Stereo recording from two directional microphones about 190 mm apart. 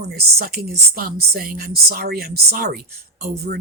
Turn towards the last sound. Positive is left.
turn(degrees=-55)  # may be behind; listen again after turning